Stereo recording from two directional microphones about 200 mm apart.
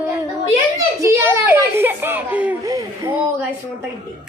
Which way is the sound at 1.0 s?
15° right (ahead or behind).